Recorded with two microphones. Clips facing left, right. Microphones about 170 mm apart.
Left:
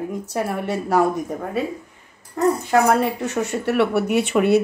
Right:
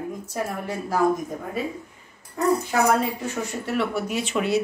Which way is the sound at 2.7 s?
65° left (ahead or behind).